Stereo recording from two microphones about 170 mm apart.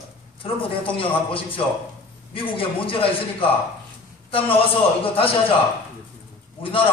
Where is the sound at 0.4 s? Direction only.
35° left (ahead or behind).